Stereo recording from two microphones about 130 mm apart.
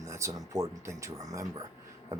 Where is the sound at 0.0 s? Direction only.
25° right (ahead or behind).